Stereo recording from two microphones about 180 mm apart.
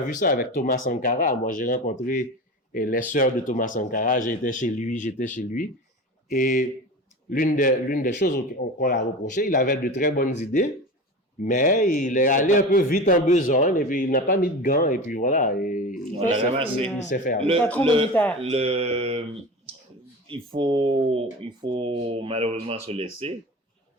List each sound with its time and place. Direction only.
0.1 s a man's voice: 50° left (ahead or behind)
16.1 s speech: 35° right (ahead or behind)
17.0 s a man's voice: 45° left (ahead or behind)
17.6 s a man's voice: 10° left (ahead or behind)
18.3 s speech: 35° right (ahead or behind)
19.7 s clicking: 30° right (ahead or behind)
20.2 s speech: 30° right (ahead or behind)